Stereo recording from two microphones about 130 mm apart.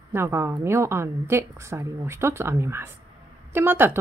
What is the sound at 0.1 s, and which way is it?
A woman's voice, 20° right (ahead or behind).